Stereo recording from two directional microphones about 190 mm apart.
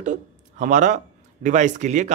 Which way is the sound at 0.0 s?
40° right (ahead or behind).